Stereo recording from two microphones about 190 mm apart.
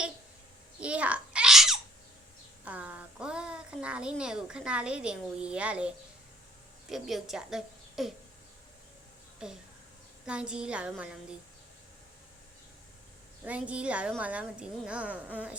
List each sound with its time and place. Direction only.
0.8 s babbling: 5° right (ahead or behind)
2.6 s a sound: 5° right (ahead or behind)
6.9 s a woman's voice: centre (ahead or behind)
9.4 s a woman's voice: 5° right (ahead or behind)
13.4 s a woman's voice: 5° right (ahead or behind)